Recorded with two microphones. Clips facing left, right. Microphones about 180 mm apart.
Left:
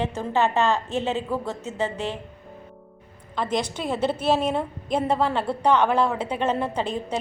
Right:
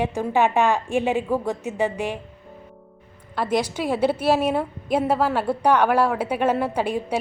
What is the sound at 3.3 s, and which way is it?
A woman's voice, 10° right (ahead or behind).